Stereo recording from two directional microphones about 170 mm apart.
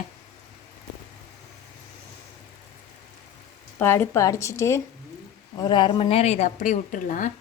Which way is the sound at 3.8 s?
15° left (ahead or behind).